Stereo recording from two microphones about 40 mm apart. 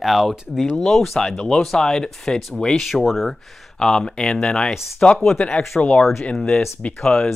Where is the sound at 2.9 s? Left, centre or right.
Centre.